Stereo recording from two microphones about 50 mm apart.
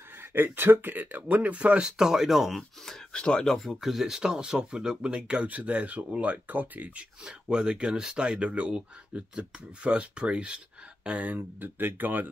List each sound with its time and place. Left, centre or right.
0.3 s speech: right
1.3 s speech: right
1.8 s speech: centre
2.8 s speech: centre
3.6 s speech: centre; by 6.9 s right
7.2 s speech: centre
11.3 s speech: right